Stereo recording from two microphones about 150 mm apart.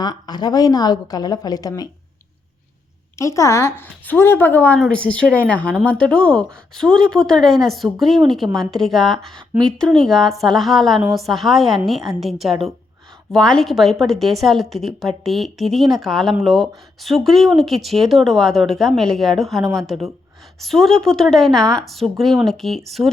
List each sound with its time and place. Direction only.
0.0 s a woman's voice: 30° left (ahead or behind)
3.2 s a woman's voice: 20° left (ahead or behind); by 22.8 s centre (ahead or behind)
23.0 s speech: 15° right (ahead or behind)